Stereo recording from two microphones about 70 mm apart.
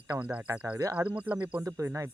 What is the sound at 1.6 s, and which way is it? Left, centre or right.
Speech, right.